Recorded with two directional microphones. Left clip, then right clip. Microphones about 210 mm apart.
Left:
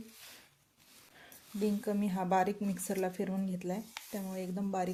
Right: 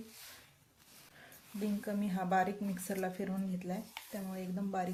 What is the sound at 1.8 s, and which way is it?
Speech, 35° left (ahead or behind).